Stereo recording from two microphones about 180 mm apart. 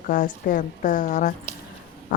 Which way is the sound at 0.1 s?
50° left (ahead or behind).